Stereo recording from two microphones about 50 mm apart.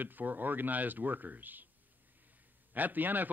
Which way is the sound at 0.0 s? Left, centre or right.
Right.